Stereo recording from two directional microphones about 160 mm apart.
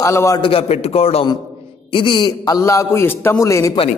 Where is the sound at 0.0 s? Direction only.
20° left (ahead or behind).